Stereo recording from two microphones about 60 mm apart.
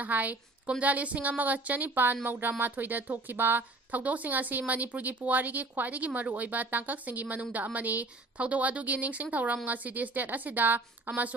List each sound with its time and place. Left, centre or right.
0.0 s a woman's voice: right